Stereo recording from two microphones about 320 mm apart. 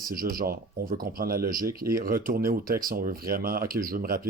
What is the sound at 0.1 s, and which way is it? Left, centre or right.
Speech, right.